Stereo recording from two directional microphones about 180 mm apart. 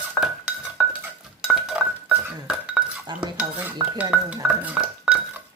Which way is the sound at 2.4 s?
5° right (ahead or behind).